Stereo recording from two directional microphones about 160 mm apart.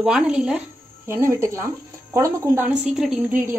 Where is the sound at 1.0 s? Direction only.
15° right (ahead or behind).